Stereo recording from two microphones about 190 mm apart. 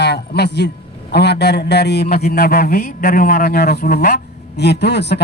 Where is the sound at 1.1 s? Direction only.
60° left (ahead or behind).